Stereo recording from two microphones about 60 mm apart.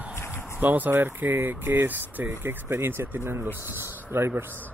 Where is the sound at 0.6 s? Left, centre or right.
Right.